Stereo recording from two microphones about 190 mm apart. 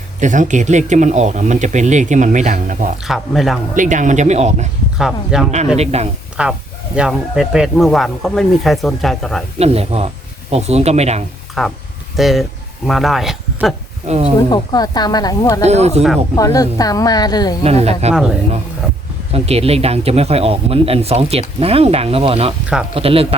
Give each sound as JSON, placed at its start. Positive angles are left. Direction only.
{"t": 0.2, "sound": "speech", "side_deg": -40}
{"t": 3.0, "sound": "speech", "side_deg": 0}
{"t": 3.8, "sound": "speech", "side_deg": -40}
{"t": 4.9, "sound": "speech", "side_deg": 0}
{"t": 5.7, "sound": "speech", "side_deg": -35}
{"t": 6.4, "sound": "speech", "side_deg": -5}
{"t": 9.6, "sound": "speech", "side_deg": -30}
{"t": 11.6, "sound": "speech", "side_deg": 0}
{"t": 14.1, "sound": "speech", "side_deg": -30}
{"t": 14.5, "sound": "speech", "side_deg": 20}
{"t": 15.6, "sound": "speech", "side_deg": -35}
{"t": 16.3, "sound": "speech", "side_deg": 20}
{"t": 17.6, "sound": "speech", "side_deg": -35}
{"t": 19.3, "sound": "speech", "side_deg": -30}